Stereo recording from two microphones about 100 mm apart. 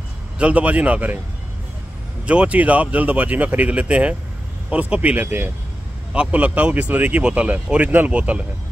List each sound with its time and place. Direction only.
0.4 s speech: 15° right (ahead or behind)
2.2 s speech: 10° right (ahead or behind)